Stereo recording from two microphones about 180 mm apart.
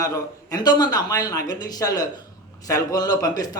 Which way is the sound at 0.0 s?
20° left (ahead or behind).